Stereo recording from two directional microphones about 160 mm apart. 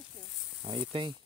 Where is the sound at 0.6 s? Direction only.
35° right (ahead or behind).